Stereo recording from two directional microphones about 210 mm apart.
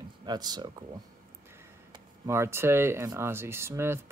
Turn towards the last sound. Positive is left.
turn(degrees=-10)  # may be behind; listen again after turning